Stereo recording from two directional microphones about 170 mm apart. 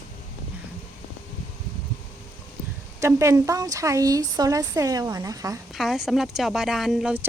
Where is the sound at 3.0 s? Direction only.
15° right (ahead or behind).